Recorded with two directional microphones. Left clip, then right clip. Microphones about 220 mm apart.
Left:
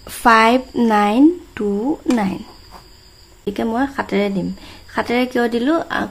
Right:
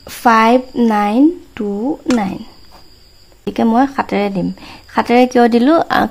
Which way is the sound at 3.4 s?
25° right (ahead or behind).